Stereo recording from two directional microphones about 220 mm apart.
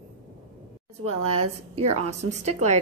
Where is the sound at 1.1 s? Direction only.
90° right.